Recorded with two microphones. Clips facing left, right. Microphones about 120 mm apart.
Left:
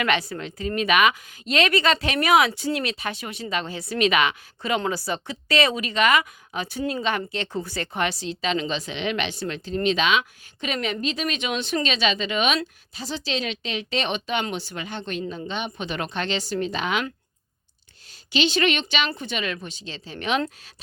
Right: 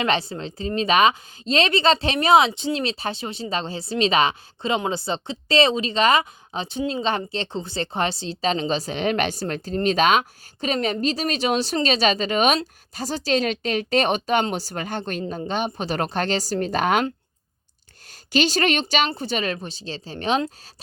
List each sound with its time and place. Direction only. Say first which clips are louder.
0.0 s a woman's voice: right 1 dB; 30° right (ahead or behind); by 17.1 s 45° right (ahead or behind)
18.1 s speech: right 2 dB; 45° right (ahead or behind)